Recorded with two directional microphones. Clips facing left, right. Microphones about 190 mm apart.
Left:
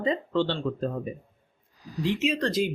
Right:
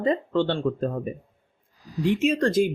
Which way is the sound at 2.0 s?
50° right (ahead or behind).